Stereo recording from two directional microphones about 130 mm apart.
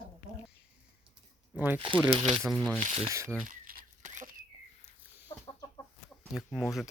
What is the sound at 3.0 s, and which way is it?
Speech, 25° right (ahead or behind).